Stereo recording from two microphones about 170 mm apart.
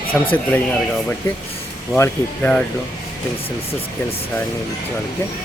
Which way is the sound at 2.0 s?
10° left (ahead or behind).